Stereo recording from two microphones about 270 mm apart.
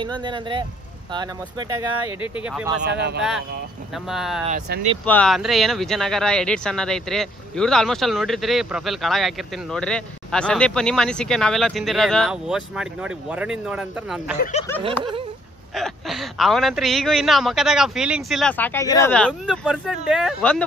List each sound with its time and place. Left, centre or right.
0.0 s speech: centre
2.9 s speech: right
3.2 s speech: centre
4.5 s speech: right
5.0 s speech: centre
15.7 s speech: centre